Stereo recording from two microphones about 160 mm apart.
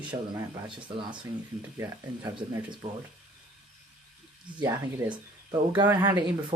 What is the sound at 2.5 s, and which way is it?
Speech, 25° right (ahead or behind).